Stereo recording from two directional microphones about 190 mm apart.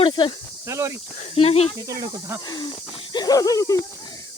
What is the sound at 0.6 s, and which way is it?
Speech, 15° right (ahead or behind).